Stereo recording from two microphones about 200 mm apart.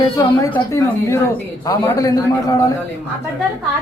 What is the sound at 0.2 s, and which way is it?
A man's voice, 15° left (ahead or behind).